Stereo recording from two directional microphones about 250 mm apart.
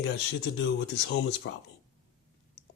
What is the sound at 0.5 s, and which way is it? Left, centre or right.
Speech, left.